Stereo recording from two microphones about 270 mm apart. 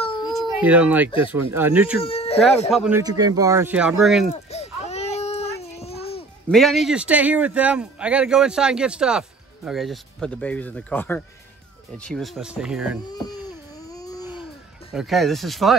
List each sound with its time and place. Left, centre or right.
0.6 s speech: centre
2.0 s a sound: left
2.7 s speech: centre
3.0 s speech: centre
4.3 s baby cry: left
6.5 s speech: centre
13.1 s a sound: centre
14.9 s speech: centre